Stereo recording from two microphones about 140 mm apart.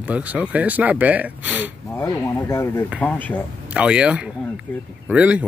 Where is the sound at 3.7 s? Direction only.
5° right (ahead or behind).